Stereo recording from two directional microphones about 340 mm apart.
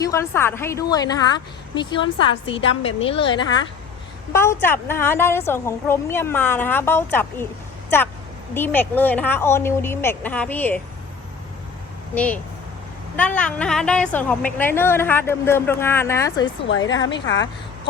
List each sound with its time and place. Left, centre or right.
0.0 s a woman's voice: centre
12.1 s a woman's voice: centre
17.1 s a woman's voice: left